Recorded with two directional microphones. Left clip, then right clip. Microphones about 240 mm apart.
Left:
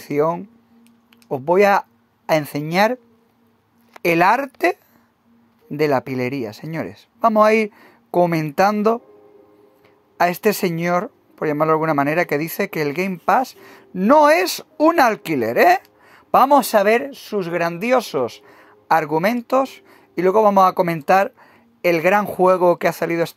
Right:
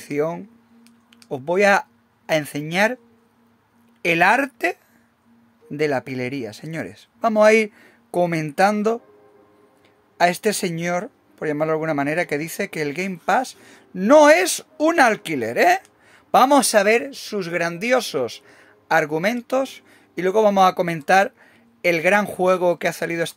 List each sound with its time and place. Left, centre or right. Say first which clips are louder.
0.0 s speech: left 4 dB; centre
4.0 s speech: left 1 dB; centre
10.1 s speech: left 1 dB; centre